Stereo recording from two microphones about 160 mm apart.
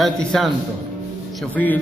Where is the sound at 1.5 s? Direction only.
10° left (ahead or behind).